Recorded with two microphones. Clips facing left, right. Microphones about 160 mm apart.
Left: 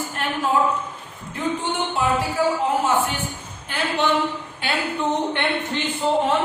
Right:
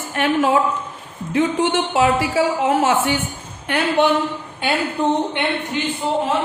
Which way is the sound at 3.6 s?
65° right (ahead or behind).